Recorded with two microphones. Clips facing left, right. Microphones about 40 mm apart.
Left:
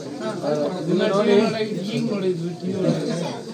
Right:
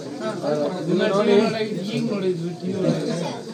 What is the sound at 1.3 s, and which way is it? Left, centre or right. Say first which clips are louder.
Speech: even; centre.